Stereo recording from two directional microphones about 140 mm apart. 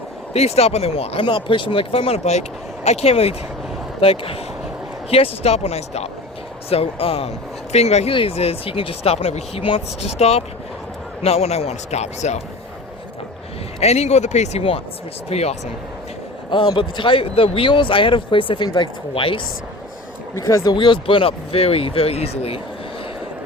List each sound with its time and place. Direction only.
0.3 s speech: 50° left (ahead or behind)
13.7 s speech: 50° left (ahead or behind)
16.5 s speech: 35° left (ahead or behind)
20.3 s speech: 25° left (ahead or behind); by 22.6 s 45° left (ahead or behind)